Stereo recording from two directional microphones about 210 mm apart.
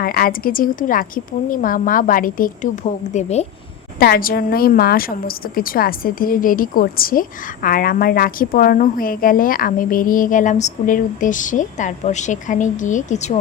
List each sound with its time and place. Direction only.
0.0 s a woman's voice: 45° left (ahead or behind)
4.0 s a woman's voice: 45° left (ahead or behind)